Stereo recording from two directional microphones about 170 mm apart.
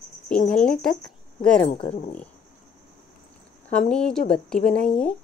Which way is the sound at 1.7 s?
35° left (ahead or behind).